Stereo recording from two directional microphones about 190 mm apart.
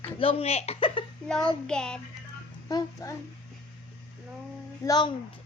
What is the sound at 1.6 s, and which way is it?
Speech, 5° left (ahead or behind).